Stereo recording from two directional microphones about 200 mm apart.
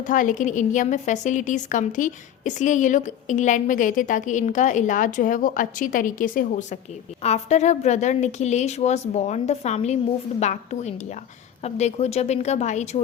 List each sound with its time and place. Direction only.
0.0 s a woman's voice: 40° left (ahead or behind)